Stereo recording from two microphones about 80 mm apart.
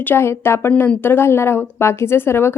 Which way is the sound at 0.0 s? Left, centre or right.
Left.